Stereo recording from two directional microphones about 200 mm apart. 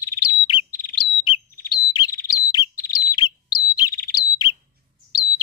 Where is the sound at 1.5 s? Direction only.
50° left (ahead or behind).